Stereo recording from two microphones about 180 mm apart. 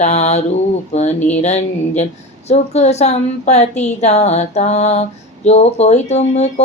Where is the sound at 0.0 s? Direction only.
40° left (ahead or behind).